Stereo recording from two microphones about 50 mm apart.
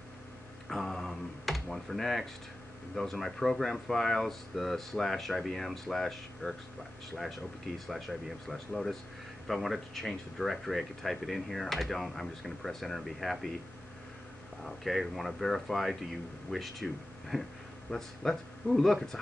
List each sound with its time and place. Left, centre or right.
0.7 s computer keyboard: centre
2.9 s speech: centre
14.6 s speech: centre